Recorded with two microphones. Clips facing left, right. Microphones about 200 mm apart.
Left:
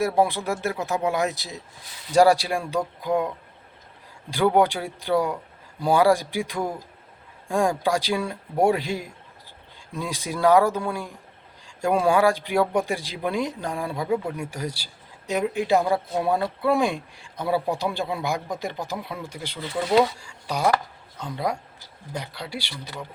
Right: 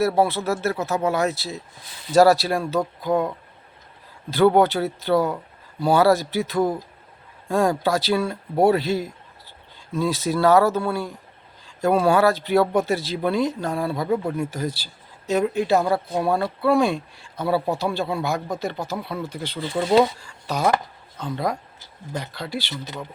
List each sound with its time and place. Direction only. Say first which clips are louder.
0.0 s speech: right 2 dB; 15° left (ahead or behind)
4.3 s speech: right 3 dB; 15° left (ahead or behind)
19.5 s speech: right 2 dB; 30° right (ahead or behind)
20.1 s speech: right 2 dB; 10° left (ahead or behind)